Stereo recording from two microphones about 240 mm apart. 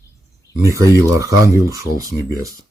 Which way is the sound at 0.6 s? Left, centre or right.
Centre.